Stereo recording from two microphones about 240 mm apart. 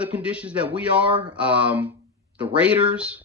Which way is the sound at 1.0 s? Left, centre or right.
Right.